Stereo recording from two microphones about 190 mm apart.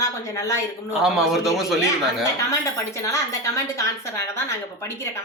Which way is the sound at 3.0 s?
15° left (ahead or behind).